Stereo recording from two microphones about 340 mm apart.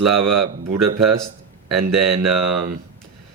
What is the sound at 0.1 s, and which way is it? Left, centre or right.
Speech, right.